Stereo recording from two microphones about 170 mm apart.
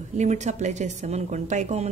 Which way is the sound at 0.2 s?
45° right (ahead or behind).